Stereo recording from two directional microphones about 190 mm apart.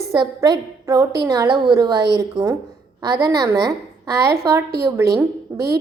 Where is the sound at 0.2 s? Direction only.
20° right (ahead or behind).